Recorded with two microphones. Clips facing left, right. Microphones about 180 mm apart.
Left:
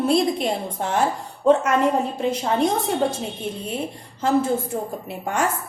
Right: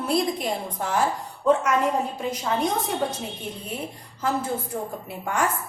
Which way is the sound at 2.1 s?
25° left (ahead or behind).